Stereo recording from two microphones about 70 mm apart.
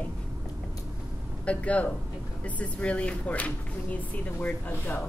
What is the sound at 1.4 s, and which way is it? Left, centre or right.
Speech, centre.